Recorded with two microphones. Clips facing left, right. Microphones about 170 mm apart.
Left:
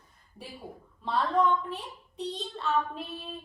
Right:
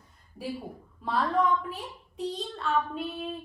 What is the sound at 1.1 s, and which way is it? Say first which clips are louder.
A woman's voice: even; 5° right (ahead or behind).